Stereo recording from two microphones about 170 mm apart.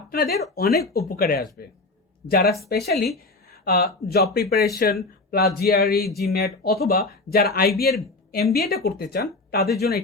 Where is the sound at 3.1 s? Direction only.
65° left (ahead or behind).